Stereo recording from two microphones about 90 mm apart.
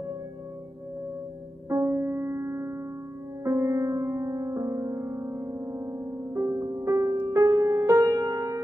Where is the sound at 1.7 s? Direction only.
30° right (ahead or behind).